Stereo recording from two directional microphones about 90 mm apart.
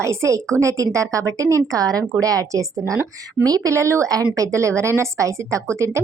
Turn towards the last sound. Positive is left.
turn(degrees=-30)  # may be behind; listen again after turning